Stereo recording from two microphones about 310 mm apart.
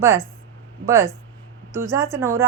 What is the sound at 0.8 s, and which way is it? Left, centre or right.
A woman's voice, centre.